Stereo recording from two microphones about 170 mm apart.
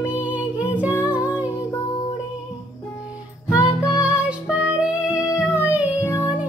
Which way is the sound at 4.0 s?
5° right (ahead or behind).